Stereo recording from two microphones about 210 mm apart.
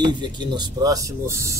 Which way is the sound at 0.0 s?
20° right (ahead or behind).